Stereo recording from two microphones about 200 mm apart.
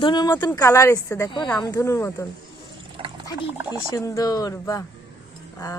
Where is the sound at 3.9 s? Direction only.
15° left (ahead or behind).